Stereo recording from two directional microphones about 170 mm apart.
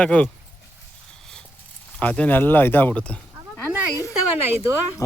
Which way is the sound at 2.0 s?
10° left (ahead or behind).